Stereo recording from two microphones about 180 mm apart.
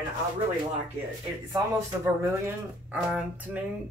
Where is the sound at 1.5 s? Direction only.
15° right (ahead or behind).